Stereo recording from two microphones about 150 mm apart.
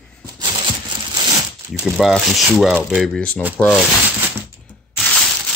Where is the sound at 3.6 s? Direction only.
5° right (ahead or behind).